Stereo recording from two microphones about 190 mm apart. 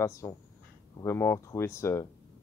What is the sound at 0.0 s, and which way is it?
Speech, 15° left (ahead or behind).